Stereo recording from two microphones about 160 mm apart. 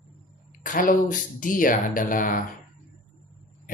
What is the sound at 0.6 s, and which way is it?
Speech, 55° left (ahead or behind).